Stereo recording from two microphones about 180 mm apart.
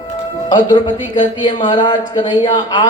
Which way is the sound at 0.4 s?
25° left (ahead or behind).